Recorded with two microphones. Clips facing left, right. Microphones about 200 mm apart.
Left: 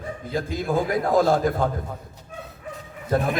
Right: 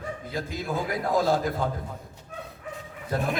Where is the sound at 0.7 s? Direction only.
50° left (ahead or behind).